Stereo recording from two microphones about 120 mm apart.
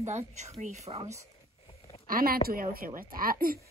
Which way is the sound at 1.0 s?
25° right (ahead or behind).